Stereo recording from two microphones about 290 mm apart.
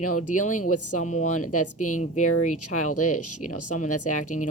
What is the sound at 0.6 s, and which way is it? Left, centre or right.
Speech, left.